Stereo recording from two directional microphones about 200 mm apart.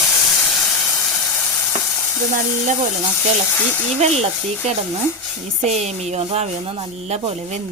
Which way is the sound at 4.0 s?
30° right (ahead or behind).